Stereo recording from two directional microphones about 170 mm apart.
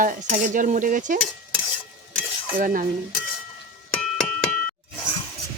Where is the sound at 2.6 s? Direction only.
50° right (ahead or behind).